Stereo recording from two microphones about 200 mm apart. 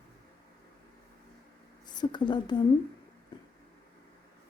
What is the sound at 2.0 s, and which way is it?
Speech, 25° left (ahead or behind).